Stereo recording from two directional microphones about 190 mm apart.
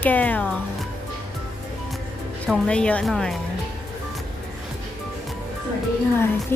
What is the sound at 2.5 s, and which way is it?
Speech, 5° left (ahead or behind).